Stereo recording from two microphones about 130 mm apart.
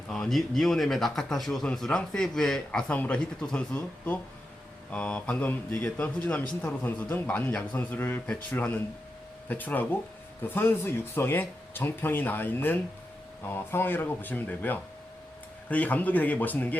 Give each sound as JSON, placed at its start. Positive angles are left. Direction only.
{"t": 0.1, "sound": "a man's voice", "side_deg": 5}